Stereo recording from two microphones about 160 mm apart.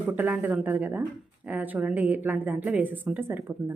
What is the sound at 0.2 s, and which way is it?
A woman's voice, 10° right (ahead or behind).